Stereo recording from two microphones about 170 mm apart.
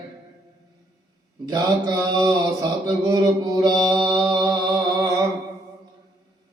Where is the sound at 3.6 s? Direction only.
25° right (ahead or behind).